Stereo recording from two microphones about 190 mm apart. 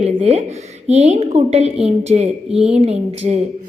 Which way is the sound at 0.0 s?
35° right (ahead or behind).